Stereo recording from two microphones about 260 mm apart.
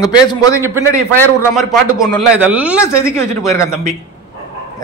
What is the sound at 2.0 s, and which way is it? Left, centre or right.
Speech, centre.